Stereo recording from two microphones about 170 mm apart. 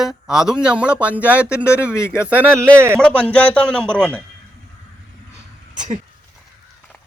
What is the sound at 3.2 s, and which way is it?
Speech, 5° left (ahead or behind).